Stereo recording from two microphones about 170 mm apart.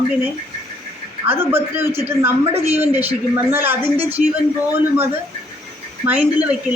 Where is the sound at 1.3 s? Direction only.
15° right (ahead or behind).